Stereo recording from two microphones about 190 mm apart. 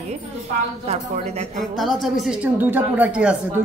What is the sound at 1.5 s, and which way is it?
A woman's voice, centre (ahead or behind).